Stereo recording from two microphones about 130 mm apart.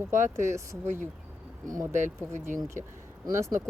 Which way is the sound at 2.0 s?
80° right.